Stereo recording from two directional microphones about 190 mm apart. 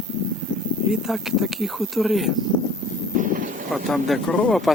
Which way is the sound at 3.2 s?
45° right (ahead or behind).